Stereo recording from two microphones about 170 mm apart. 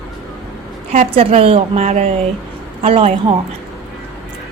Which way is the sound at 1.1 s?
35° right (ahead or behind).